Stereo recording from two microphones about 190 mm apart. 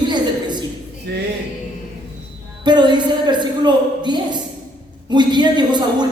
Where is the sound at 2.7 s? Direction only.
25° right (ahead or behind).